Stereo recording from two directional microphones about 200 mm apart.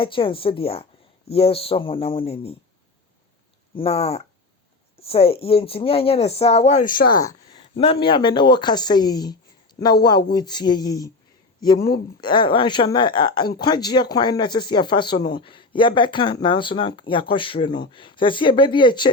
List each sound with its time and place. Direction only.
0.0 s speech: 25° left (ahead or behind)
3.8 s speech: 30° left (ahead or behind); by 7.3 s 45° left (ahead or behind)
7.3 s speech: 25° left (ahead or behind)